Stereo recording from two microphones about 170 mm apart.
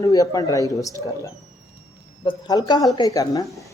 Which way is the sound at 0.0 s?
20° left (ahead or behind).